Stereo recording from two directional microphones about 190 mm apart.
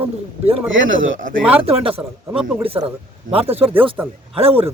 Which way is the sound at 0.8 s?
90° right.